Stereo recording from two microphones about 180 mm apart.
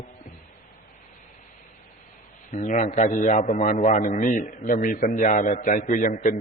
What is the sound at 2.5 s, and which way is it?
A man's voice, 40° left (ahead or behind).